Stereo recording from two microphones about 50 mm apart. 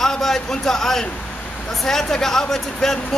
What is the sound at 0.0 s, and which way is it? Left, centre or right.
Speech, centre.